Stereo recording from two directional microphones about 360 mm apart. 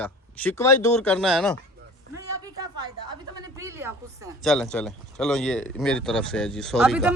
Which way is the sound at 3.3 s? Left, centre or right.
Centre.